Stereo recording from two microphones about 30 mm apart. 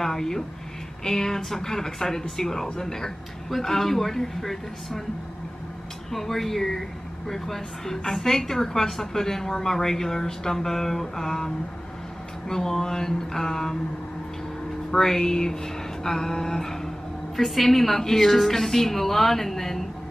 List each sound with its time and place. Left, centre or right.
0.0 s a woman's voice: centre
6.1 s a woman's voice: centre
14.9 s a woman's voice: centre